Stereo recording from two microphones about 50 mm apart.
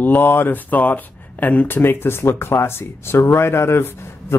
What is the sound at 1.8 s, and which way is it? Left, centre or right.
Speech, left.